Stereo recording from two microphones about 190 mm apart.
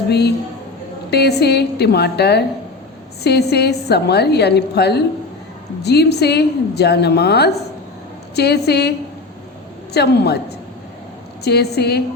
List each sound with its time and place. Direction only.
0.1 s a woman's voice: 60° left (ahead or behind)
11.4 s a woman's voice: 60° left (ahead or behind)